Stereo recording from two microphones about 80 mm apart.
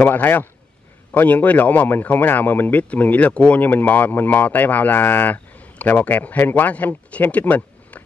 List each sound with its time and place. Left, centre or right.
0.0 s speech: left